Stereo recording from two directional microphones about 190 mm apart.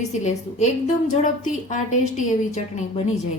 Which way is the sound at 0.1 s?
40° left (ahead or behind).